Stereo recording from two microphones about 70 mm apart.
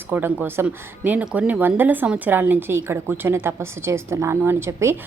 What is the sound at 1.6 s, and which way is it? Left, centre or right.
A woman's voice, right.